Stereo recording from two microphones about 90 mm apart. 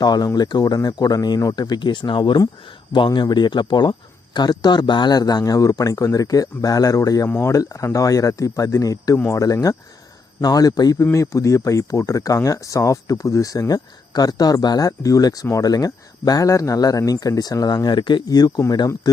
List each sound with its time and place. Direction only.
0.0 s a man's voice: 50° left (ahead or behind)
7.3 s speech: 25° left (ahead or behind)
7.5 s a man's voice: 35° left (ahead or behind)
11.0 s a man's voice: 35° left (ahead or behind); by 18.2 s 60° left (ahead or behind)
18.3 s a man's voice: 50° left (ahead or behind)